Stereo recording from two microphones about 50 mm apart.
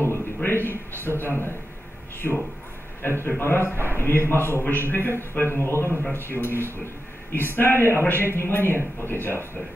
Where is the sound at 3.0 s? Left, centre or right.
Left.